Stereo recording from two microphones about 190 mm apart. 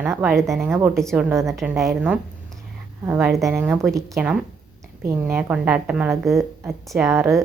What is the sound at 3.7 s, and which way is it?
A woman's voice, centre (ahead or behind).